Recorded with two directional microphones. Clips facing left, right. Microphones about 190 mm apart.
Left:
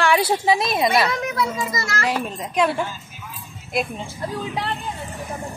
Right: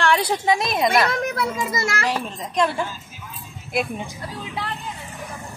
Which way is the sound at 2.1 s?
5° left (ahead or behind).